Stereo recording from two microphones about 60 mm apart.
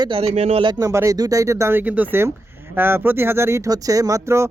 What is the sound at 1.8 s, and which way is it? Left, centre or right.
Speech, right.